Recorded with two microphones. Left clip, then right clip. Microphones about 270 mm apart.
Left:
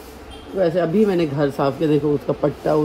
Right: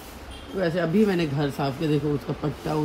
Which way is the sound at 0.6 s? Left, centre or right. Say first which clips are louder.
Left 6 dB; centre.